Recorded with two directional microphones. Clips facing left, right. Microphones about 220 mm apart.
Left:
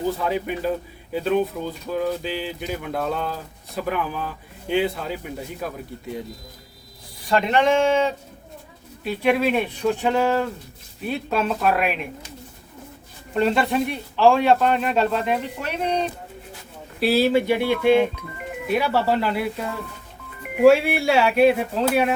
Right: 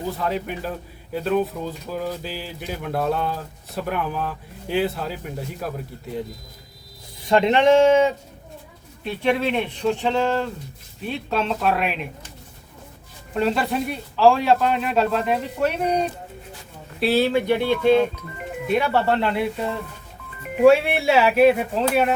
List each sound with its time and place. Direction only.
0.2 s speech: centre (ahead or behind)
7.3 s speech: 20° right (ahead or behind)
9.0 s speech: 5° left (ahead or behind)
13.3 s speech: centre (ahead or behind)